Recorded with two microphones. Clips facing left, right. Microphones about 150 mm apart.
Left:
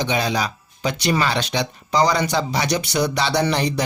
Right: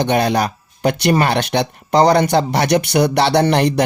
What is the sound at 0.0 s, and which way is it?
Speech, 55° right (ahead or behind).